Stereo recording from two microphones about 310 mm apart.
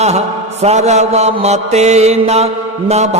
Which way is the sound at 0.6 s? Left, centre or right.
Right.